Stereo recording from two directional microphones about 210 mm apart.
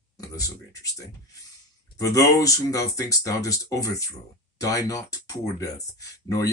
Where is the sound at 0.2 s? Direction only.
15° left (ahead or behind).